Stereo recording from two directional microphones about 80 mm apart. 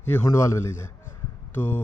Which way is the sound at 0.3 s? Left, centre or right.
Left.